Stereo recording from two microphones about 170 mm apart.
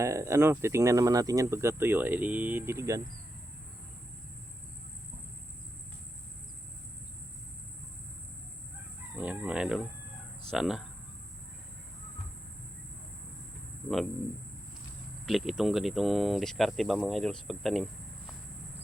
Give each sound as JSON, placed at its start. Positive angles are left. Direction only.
{"t": 0.0, "sound": "speech", "side_deg": -15}
{"t": 9.1, "sound": "chicken", "side_deg": -10}
{"t": 10.5, "sound": "speech", "side_deg": 0}
{"t": 15.3, "sound": "speech", "side_deg": 0}